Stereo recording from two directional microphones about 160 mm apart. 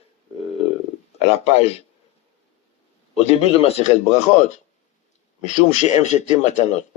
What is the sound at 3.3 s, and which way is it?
Speech, 40° left (ahead or behind).